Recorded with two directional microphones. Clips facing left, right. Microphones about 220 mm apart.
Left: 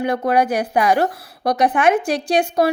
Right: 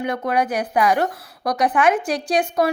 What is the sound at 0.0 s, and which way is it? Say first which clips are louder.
A woman's voice: left 4 dB; 30° left (ahead or behind).